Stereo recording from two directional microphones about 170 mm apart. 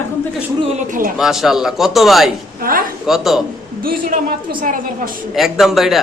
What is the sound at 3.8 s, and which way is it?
A woman's voice, 60° right (ahead or behind).